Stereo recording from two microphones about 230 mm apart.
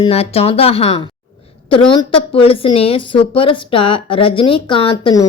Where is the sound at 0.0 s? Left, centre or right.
Left.